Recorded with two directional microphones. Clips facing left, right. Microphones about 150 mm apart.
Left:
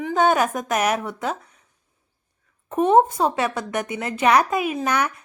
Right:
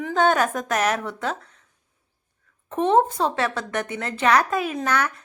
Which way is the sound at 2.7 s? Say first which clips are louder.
Left 3 dB; 10° left (ahead or behind).